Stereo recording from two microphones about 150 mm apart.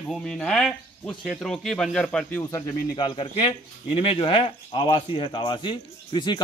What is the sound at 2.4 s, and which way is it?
Speech, 20° left (ahead or behind).